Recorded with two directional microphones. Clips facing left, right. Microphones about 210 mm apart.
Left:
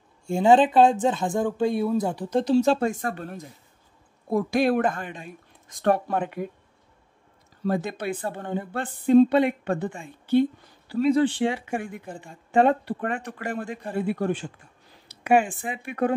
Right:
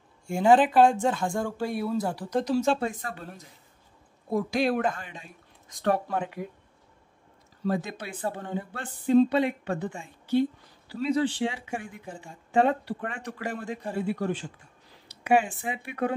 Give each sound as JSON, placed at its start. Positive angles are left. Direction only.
{"t": 0.3, "sound": "speech", "side_deg": 25}
{"t": 7.6, "sound": "speech", "side_deg": 55}